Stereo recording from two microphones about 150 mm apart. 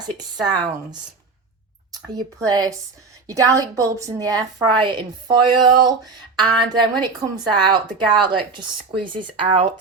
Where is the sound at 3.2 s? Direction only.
20° right (ahead or behind).